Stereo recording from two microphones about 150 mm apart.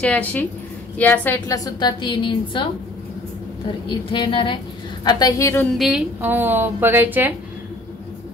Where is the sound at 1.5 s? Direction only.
25° left (ahead or behind).